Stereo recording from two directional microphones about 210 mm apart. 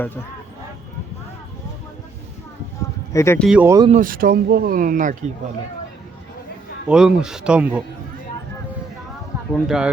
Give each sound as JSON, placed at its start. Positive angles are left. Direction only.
{"t": 3.1, "sound": "speech", "side_deg": 15}
{"t": 3.4, "sound": "speech", "side_deg": -5}
{"t": 3.9, "sound": "speech", "side_deg": -40}
{"t": 6.8, "sound": "speech", "side_deg": -5}
{"t": 9.5, "sound": "speech", "side_deg": -5}